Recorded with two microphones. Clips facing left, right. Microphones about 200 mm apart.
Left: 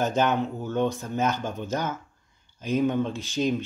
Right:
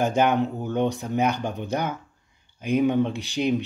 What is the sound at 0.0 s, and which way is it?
Speech, 15° right (ahead or behind).